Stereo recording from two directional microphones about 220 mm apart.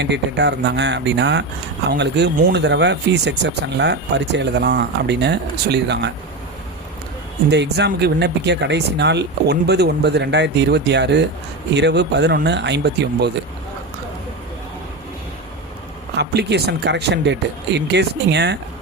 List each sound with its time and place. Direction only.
0.0 s speech: 50° right (ahead or behind)
7.5 s speech: 50° right (ahead or behind)
16.1 s speech: 50° right (ahead or behind)